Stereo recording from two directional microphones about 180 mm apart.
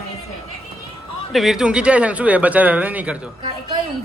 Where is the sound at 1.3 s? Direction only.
Centre (ahead or behind).